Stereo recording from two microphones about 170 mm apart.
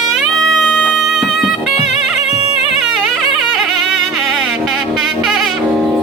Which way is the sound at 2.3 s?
35° left (ahead or behind).